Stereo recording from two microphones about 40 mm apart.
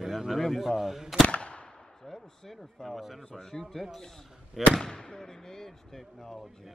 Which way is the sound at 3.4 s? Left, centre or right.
Centre.